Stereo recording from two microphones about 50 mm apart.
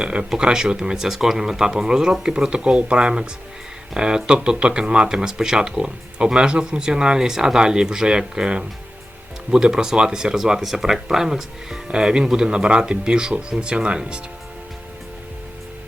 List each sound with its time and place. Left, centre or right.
0.0 s speech: centre